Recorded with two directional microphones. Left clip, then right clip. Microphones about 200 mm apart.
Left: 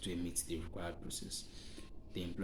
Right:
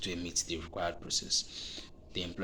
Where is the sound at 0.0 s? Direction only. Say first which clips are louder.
Right 7 dB; 20° left (ahead or behind).